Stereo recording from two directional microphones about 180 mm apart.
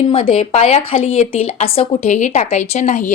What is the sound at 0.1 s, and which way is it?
A woman's voice, 30° left (ahead or behind).